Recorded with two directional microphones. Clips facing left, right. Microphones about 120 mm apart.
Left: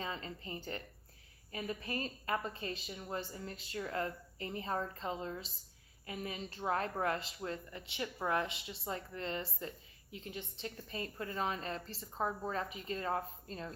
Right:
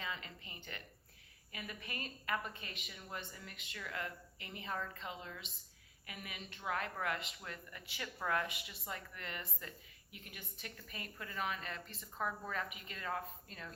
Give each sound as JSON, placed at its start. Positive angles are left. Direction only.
{"t": 0.0, "sound": "a woman's voice", "side_deg": 35}